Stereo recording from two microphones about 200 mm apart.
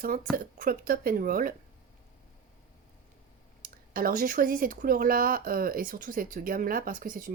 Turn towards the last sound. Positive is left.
turn(degrees=-45)  # may be behind; listen again after turning